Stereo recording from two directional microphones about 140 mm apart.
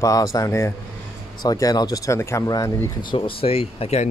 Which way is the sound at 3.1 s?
40° left (ahead or behind).